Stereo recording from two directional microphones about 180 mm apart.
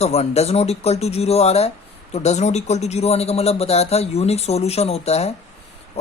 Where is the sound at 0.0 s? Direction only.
35° left (ahead or behind).